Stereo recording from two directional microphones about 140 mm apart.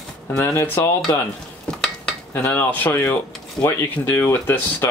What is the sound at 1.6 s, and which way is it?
Dishes, 5° left (ahead or behind).